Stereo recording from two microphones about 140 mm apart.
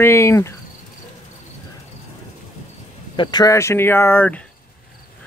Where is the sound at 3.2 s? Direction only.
30° left (ahead or behind); by 4.4 s 15° left (ahead or behind).